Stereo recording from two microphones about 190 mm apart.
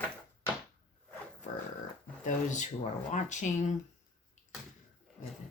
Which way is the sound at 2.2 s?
40° left (ahead or behind).